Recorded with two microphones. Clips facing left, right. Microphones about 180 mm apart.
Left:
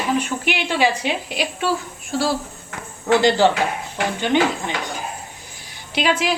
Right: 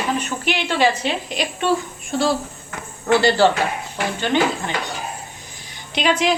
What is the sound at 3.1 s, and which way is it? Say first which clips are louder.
Speech: even; 15° left (ahead or behind).